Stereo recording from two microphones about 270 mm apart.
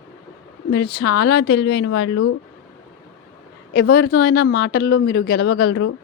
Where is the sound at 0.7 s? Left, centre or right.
Left.